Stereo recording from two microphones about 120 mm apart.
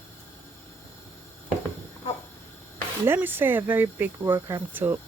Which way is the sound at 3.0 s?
15° right (ahead or behind).